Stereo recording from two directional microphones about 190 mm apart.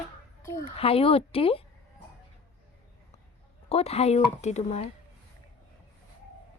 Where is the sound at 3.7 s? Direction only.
30° left (ahead or behind).